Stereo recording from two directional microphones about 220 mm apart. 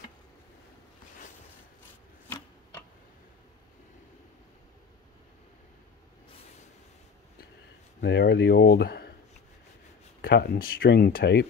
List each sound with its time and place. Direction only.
8.0 s speech: 50° left (ahead or behind)
10.2 s speech: 50° left (ahead or behind)